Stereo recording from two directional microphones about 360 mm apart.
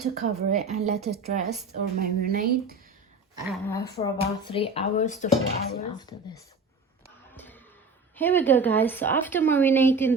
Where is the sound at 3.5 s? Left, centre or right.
Centre.